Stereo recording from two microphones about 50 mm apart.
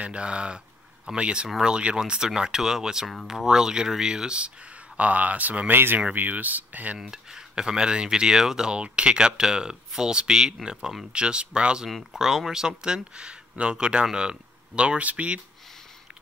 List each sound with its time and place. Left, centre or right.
0.0 s speech: right
4.9 s speech: right
7.0 s speech: centre
8.7 s speech: right
11.1 s speech: centre